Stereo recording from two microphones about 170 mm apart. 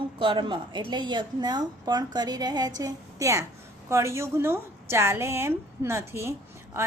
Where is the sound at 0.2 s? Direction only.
30° right (ahead or behind).